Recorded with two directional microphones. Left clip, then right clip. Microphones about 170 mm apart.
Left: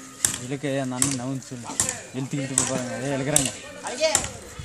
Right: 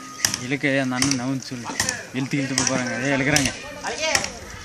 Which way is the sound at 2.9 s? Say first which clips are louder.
Right 6 dB; 5° left (ahead or behind).